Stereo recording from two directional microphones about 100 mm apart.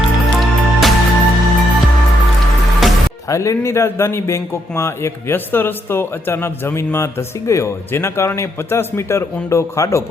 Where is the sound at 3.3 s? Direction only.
30° left (ahead or behind).